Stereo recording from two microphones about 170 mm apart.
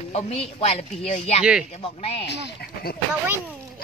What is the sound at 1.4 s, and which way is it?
Speech, 5° right (ahead or behind).